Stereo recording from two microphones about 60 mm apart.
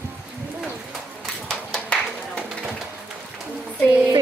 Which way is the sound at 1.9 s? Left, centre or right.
Centre.